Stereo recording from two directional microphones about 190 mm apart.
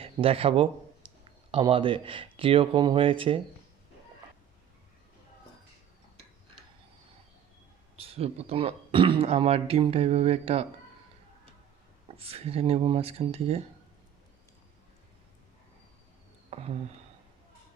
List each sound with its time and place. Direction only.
0.0 s speech: 30° right (ahead or behind)
7.9 s a man's voice: 30° right (ahead or behind)
12.0 s a man's voice: 30° right (ahead or behind)
16.5 s a sound: 30° right (ahead or behind)